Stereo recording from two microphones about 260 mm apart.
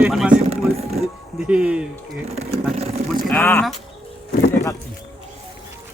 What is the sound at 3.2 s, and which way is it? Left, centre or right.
Speech, centre.